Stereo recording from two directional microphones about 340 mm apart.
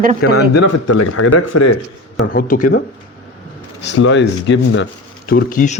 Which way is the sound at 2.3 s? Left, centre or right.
Left.